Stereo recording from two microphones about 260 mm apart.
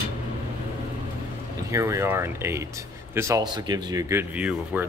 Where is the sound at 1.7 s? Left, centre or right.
Centre.